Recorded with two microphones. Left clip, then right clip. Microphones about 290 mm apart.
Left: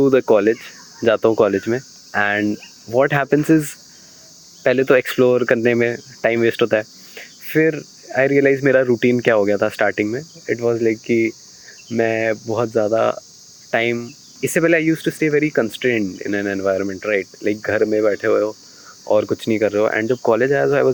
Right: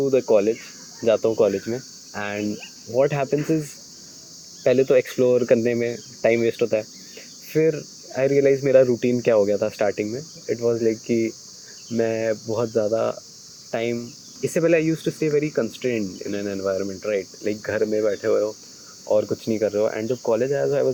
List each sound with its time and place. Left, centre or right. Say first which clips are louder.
0.0 s speech: left 4 dB; left
4.6 s speech: left 3 dB; left